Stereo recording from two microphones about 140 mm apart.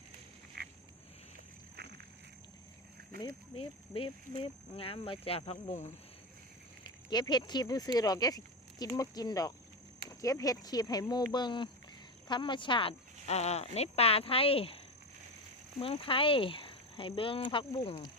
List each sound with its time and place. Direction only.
0.6 s a sound: 90° right
3.5 s speech: 40° left (ahead or behind)
6.8 s speech: 30° left (ahead or behind)
13.2 s speech: 50° left (ahead or behind)
15.8 s speech: 40° left (ahead or behind)